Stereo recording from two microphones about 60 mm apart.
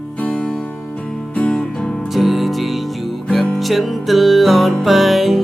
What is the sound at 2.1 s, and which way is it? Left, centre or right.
Music, centre.